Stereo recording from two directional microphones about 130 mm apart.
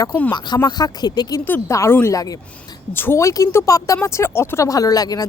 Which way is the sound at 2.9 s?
15° left (ahead or behind).